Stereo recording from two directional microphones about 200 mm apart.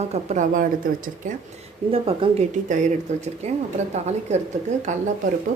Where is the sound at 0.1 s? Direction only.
40° right (ahead or behind).